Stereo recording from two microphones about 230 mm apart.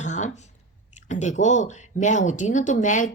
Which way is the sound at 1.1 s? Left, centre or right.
Left.